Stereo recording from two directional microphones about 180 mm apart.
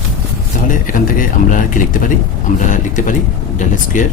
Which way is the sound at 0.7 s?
50° left (ahead or behind).